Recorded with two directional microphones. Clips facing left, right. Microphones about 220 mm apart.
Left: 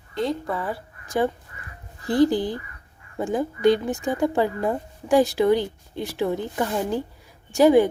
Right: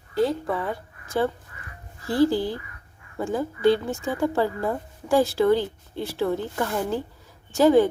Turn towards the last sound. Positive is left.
turn(degrees=15)  # may be behind; listen again after turning